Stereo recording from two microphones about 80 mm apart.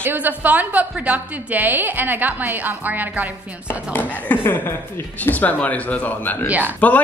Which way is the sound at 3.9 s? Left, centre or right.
Left.